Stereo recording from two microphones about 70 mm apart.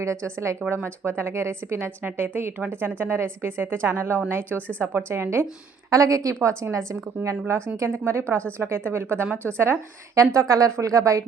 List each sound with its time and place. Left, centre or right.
0.0 s a woman's voice: right
4.4 s speech: left
4.8 s a woman's voice: right
5.9 s a woman's voice: right
9.5 s speech: centre
10.2 s a woman's voice: right